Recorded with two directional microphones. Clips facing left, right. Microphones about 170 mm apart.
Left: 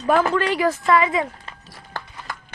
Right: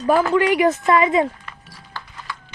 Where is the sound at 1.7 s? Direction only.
50° left (ahead or behind).